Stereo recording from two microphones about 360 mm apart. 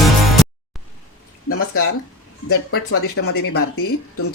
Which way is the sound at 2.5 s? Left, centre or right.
Left.